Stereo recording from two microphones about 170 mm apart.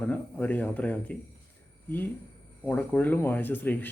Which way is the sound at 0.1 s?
10° left (ahead or behind).